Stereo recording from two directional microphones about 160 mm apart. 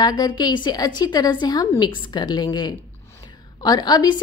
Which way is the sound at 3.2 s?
25° left (ahead or behind).